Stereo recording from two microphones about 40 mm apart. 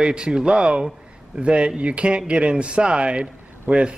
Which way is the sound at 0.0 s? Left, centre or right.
Right.